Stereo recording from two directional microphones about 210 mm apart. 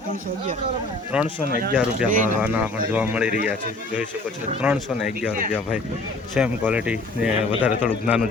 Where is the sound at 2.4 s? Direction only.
5° right (ahead or behind).